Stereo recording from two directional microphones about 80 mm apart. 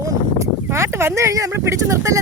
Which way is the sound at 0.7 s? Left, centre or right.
Right.